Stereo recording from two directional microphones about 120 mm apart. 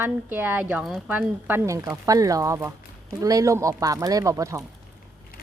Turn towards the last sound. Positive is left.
turn(degrees=-25)  # may be behind; listen again after turning